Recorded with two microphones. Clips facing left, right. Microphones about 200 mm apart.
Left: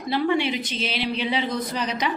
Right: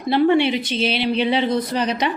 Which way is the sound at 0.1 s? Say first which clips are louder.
Right 6 dB; 65° right (ahead or behind).